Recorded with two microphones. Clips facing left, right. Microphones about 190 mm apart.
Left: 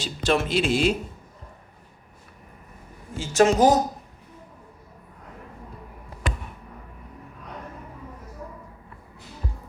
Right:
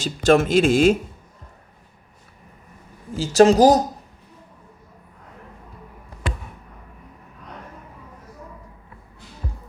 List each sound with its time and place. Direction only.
0.0 s speech: 45° right (ahead or behind)
3.2 s speech: 35° right (ahead or behind)